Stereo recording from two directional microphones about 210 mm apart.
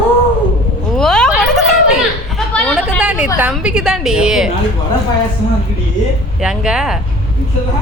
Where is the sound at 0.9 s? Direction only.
5° left (ahead or behind).